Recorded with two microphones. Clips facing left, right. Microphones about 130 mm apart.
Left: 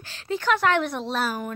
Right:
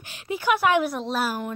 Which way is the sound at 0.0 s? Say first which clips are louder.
Even; 15° right (ahead or behind).